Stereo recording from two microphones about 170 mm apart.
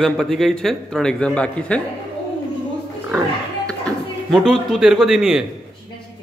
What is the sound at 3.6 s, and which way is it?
Speech, 5° left (ahead or behind).